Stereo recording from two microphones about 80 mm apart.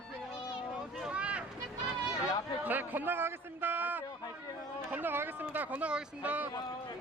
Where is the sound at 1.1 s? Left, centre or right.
Centre.